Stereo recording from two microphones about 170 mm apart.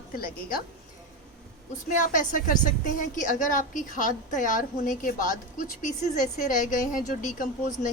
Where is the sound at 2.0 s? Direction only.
50° left (ahead or behind).